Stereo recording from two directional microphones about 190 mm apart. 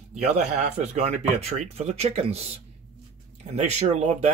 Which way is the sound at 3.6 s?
35° right (ahead or behind).